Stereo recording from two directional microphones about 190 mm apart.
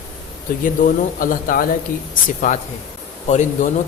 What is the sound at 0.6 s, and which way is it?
A man's voice, 45° left (ahead or behind).